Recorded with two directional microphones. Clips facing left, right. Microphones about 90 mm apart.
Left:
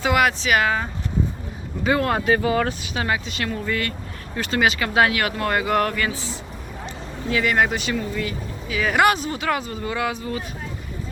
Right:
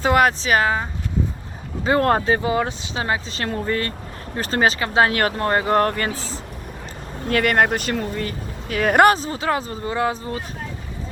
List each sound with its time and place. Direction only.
0.0 s speech: 40° right (ahead or behind)
7.3 s speech: 55° right (ahead or behind)
9.1 s speech: 30° right (ahead or behind)